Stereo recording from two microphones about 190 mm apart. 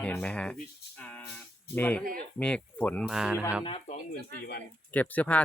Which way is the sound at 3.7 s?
35° left (ahead or behind).